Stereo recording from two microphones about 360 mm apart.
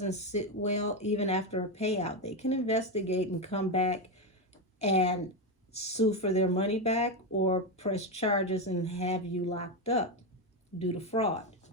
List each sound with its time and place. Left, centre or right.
0.0 s speech: centre